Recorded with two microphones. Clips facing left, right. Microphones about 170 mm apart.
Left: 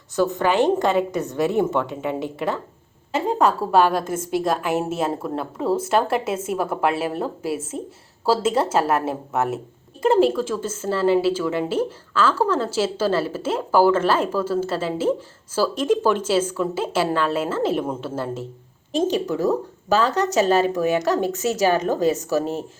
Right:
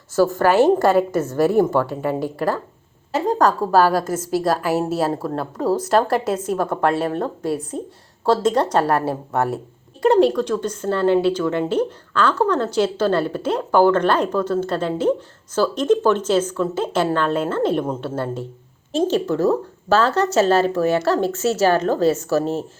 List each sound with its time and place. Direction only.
0.2 s a woman's voice: centre (ahead or behind); by 22.4 s 15° left (ahead or behind)